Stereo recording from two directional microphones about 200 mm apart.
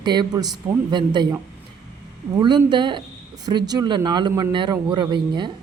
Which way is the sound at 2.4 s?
25° right (ahead or behind).